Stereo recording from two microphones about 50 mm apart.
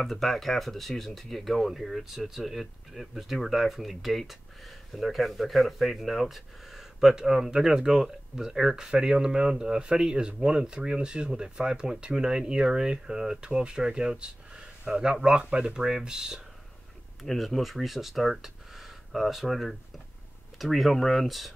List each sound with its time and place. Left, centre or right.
0.0 s speech: centre
17.2 s speech: centre